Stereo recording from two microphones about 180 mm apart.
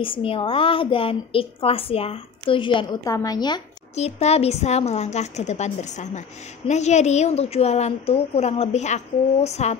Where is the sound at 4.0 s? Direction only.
35° left (ahead or behind).